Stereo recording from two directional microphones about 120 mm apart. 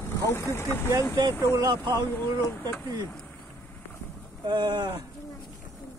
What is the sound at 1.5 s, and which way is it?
Speech, 35° right (ahead or behind).